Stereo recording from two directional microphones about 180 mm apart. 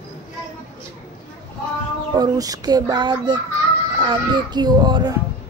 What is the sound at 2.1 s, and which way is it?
Speech, 20° right (ahead or behind).